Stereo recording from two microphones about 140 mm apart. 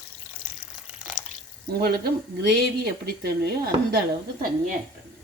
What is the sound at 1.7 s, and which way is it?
Speech, 90° right.